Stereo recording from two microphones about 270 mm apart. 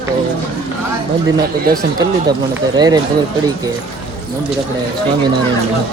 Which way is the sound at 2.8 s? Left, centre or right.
Centre.